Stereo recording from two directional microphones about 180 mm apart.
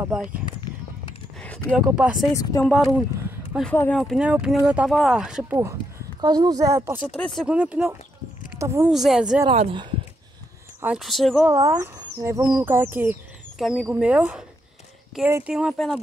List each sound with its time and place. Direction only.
0.0 s speech: 5° right (ahead or behind)
1.9 s speech: 5° right (ahead or behind)
2.2 s speech: 20° left (ahead or behind)
2.6 s speech: centre (ahead or behind)
3.7 s speech: 10° left (ahead or behind)
4.0 s speech: 5° right (ahead or behind)
8.9 s speech: centre (ahead or behind)
9.5 s speech: 30° right (ahead or behind)
10.8 s speech: 5° right (ahead or behind)
11.4 s speech: 20° right (ahead or behind)
13.6 s speech: centre (ahead or behind)